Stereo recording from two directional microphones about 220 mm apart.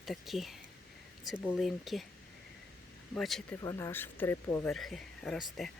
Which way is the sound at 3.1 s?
Centre (ahead or behind).